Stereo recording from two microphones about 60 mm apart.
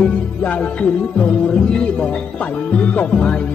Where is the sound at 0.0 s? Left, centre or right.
Centre.